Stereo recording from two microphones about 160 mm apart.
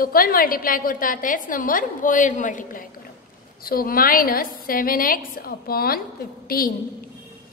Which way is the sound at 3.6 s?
65° left (ahead or behind).